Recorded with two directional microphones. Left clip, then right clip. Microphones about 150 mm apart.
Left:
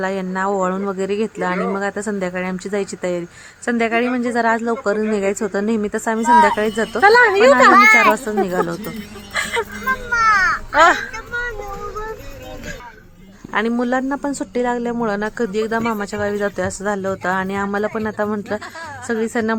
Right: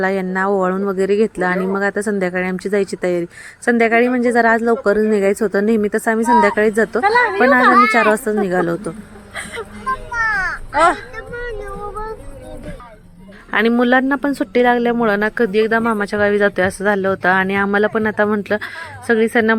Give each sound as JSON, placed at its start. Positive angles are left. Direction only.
{"t": 0.0, "sound": "speech", "side_deg": -20}
{"t": 7.0, "sound": "speech", "side_deg": 80}
{"t": 8.1, "sound": "speech", "side_deg": -20}
{"t": 9.3, "sound": "music", "side_deg": 55}
{"t": 10.2, "sound": "crow", "side_deg": -20}
{"t": 10.8, "sound": "speech", "side_deg": -10}
{"t": 13.5, "sound": "speech", "side_deg": -20}